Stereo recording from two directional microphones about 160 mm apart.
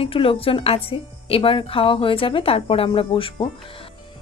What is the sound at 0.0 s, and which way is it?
Speech, 35° left (ahead or behind).